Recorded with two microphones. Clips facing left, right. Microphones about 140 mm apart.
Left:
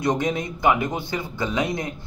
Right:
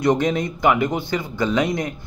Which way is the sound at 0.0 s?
20° left (ahead or behind).